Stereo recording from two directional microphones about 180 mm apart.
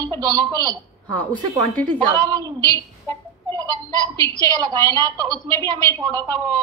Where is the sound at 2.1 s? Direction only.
20° right (ahead or behind).